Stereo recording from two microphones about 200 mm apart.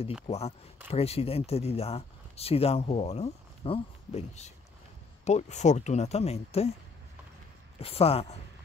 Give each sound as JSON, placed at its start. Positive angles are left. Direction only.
{"t": 0.3, "sound": "speech", "side_deg": 30}
{"t": 7.8, "sound": "speech", "side_deg": 30}